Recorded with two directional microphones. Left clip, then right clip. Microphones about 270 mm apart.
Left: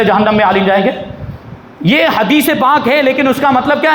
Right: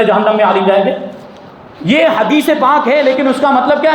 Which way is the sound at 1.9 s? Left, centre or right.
Left.